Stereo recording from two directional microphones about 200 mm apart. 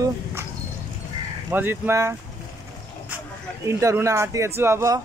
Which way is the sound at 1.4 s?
10° right (ahead or behind).